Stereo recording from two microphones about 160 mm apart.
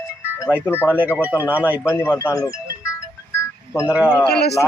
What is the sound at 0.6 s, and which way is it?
Speech, 15° left (ahead or behind).